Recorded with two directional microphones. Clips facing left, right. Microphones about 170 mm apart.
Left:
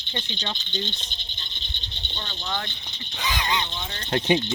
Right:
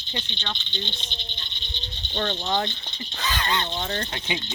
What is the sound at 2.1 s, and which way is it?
Speech, 50° right (ahead or behind).